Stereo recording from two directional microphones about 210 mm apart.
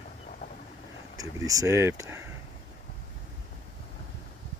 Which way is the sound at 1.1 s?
15° right (ahead or behind).